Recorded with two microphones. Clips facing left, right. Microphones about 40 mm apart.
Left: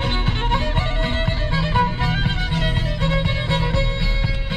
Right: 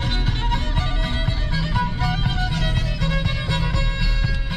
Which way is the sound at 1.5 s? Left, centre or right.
Left.